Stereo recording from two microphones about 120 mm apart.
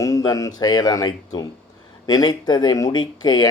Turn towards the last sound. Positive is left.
turn(degrees=35)  # may be behind; listen again after turning